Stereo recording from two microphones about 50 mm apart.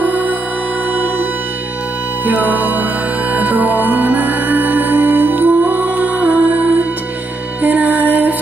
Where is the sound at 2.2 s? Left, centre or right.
Right.